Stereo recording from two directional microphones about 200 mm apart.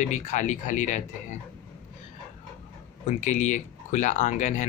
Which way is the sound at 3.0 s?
35° left (ahead or behind).